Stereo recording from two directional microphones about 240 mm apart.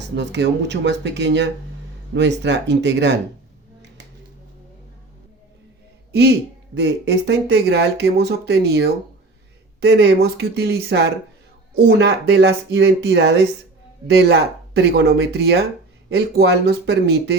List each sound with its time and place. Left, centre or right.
0.2 s speech: right
6.7 s speech: right